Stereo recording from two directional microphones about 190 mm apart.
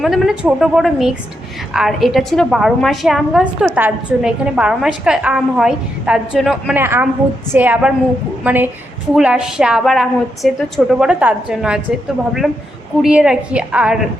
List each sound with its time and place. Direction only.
0.0 s a woman's voice: centre (ahead or behind)
6.7 s a woman's voice: 10° right (ahead or behind)
13.0 s a woman's voice: 5° right (ahead or behind)